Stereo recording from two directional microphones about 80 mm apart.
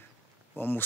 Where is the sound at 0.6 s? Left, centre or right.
Left.